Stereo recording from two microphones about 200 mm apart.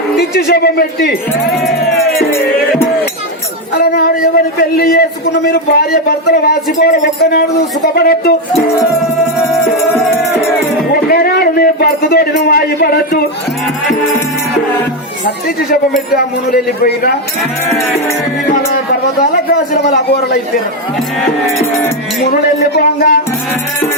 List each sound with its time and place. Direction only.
0.2 s speech: 50° left (ahead or behind)
3.8 s speech: 50° left (ahead or behind)
10.9 s a man's voice: 50° left (ahead or behind)
15.7 s speech: 50° left (ahead or behind)
19.7 s speech: 55° left (ahead or behind)
22.2 s speech: 55° left (ahead or behind)